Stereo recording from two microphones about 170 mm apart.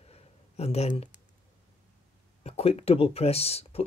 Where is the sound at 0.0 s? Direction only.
35° left (ahead or behind).